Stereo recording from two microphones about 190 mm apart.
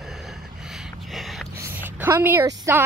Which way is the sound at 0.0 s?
Centre (ahead or behind).